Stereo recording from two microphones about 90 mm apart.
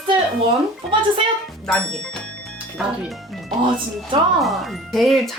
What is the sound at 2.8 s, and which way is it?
Speech, 5° right (ahead or behind).